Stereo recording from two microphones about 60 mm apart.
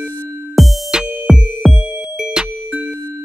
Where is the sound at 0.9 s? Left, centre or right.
Centre.